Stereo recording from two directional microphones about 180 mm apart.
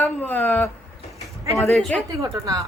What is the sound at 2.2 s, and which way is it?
Speech, 15° right (ahead or behind).